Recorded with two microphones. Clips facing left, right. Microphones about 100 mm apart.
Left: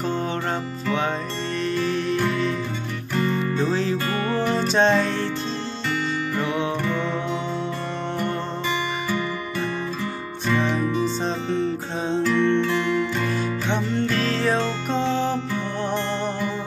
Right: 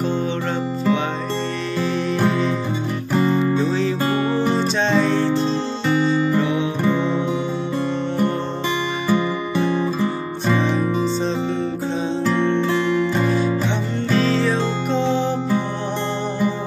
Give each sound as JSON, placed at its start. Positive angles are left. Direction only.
{"t": 2.1, "sound": "music", "side_deg": -30}
{"t": 4.6, "sound": "music", "side_deg": 45}
{"t": 5.9, "sound": "music", "side_deg": -20}
{"t": 9.1, "sound": "music", "side_deg": -25}
{"t": 12.2, "sound": "music", "side_deg": -25}
{"t": 14.4, "sound": "music", "side_deg": 50}
{"t": 15.0, "sound": "music", "side_deg": -20}